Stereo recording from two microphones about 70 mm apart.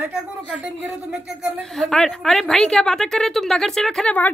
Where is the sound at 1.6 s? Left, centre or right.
Centre.